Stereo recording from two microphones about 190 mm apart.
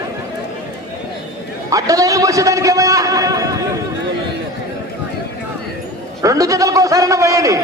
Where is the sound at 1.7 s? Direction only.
20° right (ahead or behind).